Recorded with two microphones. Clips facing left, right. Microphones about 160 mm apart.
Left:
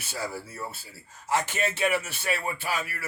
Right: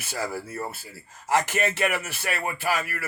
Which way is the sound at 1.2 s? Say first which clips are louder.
Right 3 dB; 90° right.